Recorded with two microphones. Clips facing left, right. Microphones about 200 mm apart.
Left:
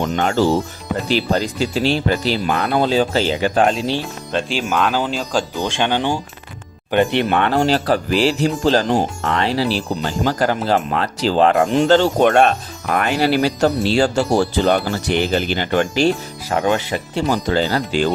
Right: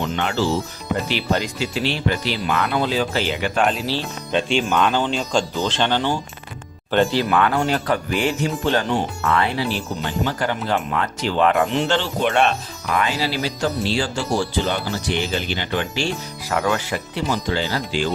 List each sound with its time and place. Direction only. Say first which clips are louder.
0.0 s speech: left 5 dB; 40° left (ahead or behind)
1.0 s speech: left 7 dB; 35° left (ahead or behind)
4.3 s speech: right 1 dB; centre (ahead or behind); by 13.5 s 60° left (ahead or behind)
14.6 s speech: left 6 dB; 60° left (ahead or behind); by 17.2 s 25° left (ahead or behind)
17.2 s speech: left 5 dB; 45° left (ahead or behind)